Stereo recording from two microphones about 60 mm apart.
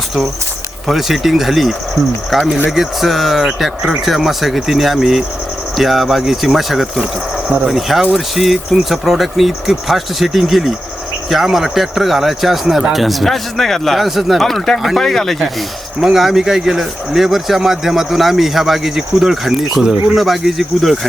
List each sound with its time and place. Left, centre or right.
0.9 s speech: centre
7.0 s speech: centre
7.7 s speech: centre
16.0 s speech: centre